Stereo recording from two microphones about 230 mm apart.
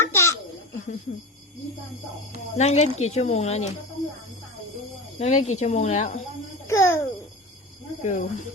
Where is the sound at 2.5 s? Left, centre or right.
Left.